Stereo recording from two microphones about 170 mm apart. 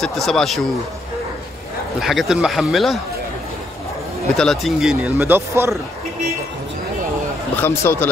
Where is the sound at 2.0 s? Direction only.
Centre (ahead or behind).